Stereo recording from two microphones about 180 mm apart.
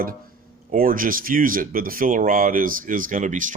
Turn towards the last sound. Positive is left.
turn(degrees=-45)  # may be behind; listen again after turning